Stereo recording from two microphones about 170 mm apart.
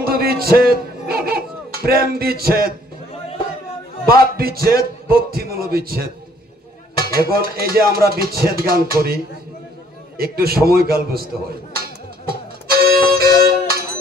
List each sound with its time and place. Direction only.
0.0 s music: 65° right (ahead or behind)
4.1 s music: 65° right (ahead or behind)
7.1 s music: 60° right (ahead or behind)
12.3 s music: 65° right (ahead or behind)